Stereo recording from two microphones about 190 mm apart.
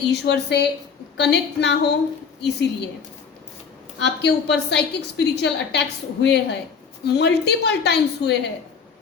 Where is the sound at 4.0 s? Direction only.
65° left (ahead or behind).